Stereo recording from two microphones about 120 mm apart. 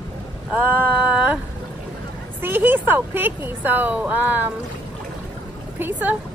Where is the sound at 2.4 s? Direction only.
15° right (ahead or behind).